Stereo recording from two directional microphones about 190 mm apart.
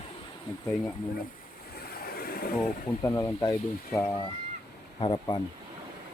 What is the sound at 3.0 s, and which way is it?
Speech, 15° left (ahead or behind).